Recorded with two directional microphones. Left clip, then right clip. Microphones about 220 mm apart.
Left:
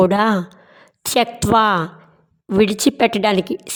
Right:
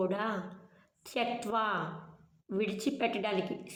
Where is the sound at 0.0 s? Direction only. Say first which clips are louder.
Left 18 dB; 50° left (ahead or behind).